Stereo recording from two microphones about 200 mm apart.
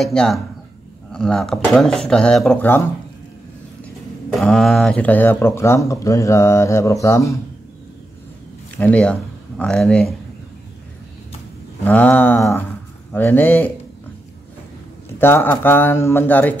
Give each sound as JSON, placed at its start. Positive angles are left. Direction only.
{"t": 0.0, "sound": "speech", "side_deg": 0}
{"t": 4.3, "sound": "speech", "side_deg": 0}
{"t": 8.7, "sound": "speech", "side_deg": 5}
{"t": 11.8, "sound": "speech", "side_deg": 10}
{"t": 15.1, "sound": "speech", "side_deg": 10}